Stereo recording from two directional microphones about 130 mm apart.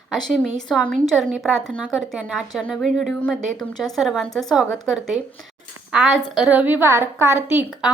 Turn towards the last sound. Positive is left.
turn(degrees=-15)  # may be behind; listen again after turning